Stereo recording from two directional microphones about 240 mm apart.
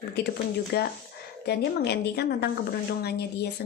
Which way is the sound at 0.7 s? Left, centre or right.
Left.